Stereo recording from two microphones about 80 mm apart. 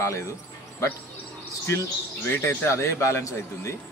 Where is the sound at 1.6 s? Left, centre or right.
Left.